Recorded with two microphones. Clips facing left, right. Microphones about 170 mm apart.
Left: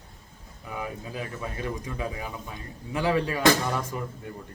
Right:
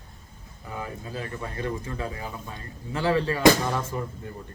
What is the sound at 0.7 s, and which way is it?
Speech, 15° left (ahead or behind).